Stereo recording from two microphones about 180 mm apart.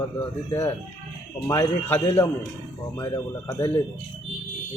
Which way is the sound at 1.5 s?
15° left (ahead or behind).